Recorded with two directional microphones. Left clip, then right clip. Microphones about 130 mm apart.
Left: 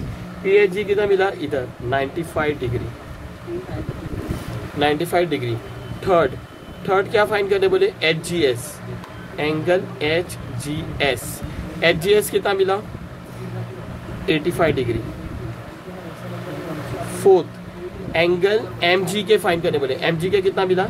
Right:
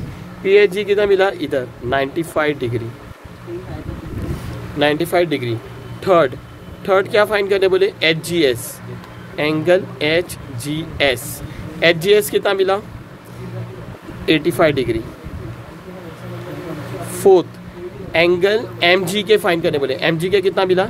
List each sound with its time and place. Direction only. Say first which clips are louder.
0.9 s speech: right 4 dB; 90° right
4.7 s speech: right 3 dB; 75° right (ahead or behind)
9.4 s speech: right 4 dB; 90° right
11.8 s speech: right 3 dB; 70° right (ahead or behind)
14.2 s speech: right 4 dB; 90° right
17.2 s speech: right 3 dB; 90° right